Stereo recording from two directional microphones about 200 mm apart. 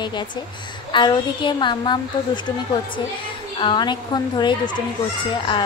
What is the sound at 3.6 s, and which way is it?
Speech, 25° left (ahead or behind).